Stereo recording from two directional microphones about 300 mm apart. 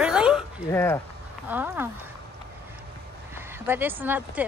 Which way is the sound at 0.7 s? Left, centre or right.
Centre.